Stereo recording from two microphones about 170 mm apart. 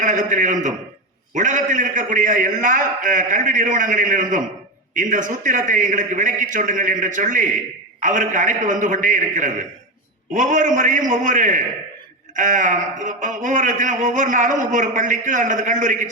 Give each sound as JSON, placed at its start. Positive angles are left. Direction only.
{"t": 0.0, "sound": "speech", "side_deg": -45}